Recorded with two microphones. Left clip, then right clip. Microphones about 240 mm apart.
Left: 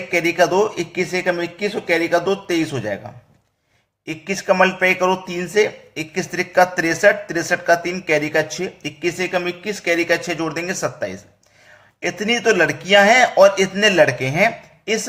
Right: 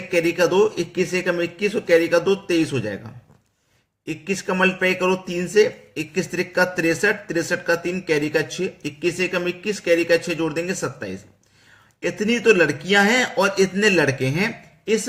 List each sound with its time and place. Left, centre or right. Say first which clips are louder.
0.1 s a man's voice: left 2 dB; centre
4.0 s a man's voice: left 4 dB; centre